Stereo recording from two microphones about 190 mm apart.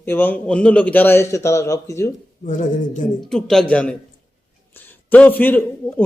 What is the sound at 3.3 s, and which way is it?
A man's voice, 5° left (ahead or behind).